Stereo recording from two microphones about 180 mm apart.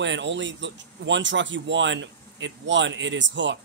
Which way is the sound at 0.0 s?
85° right.